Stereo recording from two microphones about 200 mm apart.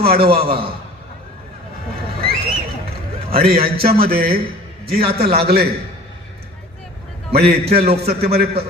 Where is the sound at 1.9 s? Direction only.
50° right (ahead or behind).